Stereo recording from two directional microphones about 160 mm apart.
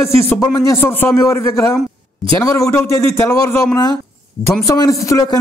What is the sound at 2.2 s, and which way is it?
Speech, centre (ahead or behind).